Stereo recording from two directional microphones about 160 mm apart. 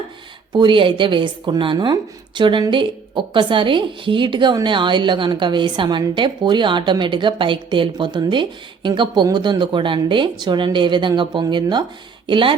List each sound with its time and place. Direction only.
0.5 s a woman's voice: 30° right (ahead or behind)